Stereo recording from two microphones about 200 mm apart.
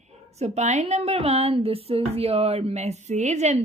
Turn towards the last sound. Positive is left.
turn(degrees=-35)  # may be behind; listen again after turning